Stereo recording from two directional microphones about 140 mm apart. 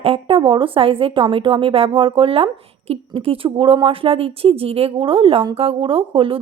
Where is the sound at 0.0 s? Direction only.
40° right (ahead or behind).